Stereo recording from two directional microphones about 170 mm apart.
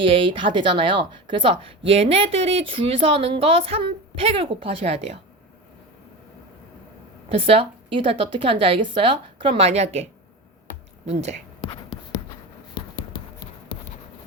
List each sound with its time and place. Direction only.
0.0 s a woman's voice: 30° right (ahead or behind)
7.3 s a woman's voice: 35° right (ahead or behind)
11.6 s beatboxing: 30° left (ahead or behind)